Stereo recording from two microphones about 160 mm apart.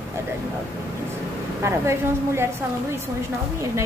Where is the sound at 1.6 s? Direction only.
15° right (ahead or behind).